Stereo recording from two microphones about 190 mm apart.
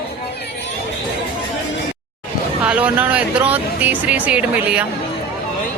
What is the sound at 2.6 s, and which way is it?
Speech, 5° right (ahead or behind).